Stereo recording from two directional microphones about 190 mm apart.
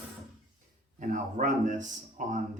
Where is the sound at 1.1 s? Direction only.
40° right (ahead or behind).